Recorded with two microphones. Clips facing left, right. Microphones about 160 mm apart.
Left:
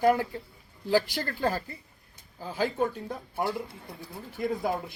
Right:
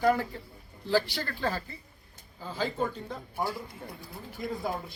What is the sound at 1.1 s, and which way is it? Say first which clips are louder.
Speech: left 3 dB; 45° left (ahead or behind).